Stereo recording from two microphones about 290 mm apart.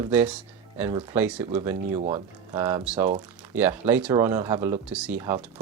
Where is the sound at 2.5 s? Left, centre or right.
Centre.